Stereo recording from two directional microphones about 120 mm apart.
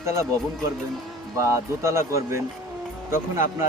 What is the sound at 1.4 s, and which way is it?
Speech, 25° right (ahead or behind).